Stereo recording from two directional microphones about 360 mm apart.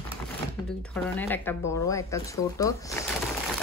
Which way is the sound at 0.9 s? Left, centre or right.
Centre.